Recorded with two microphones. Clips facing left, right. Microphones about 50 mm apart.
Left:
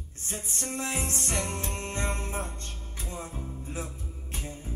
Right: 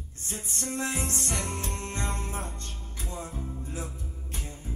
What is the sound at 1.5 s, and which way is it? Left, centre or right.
Music, left.